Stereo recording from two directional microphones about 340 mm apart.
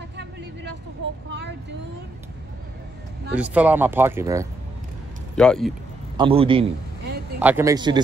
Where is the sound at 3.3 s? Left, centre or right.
Centre.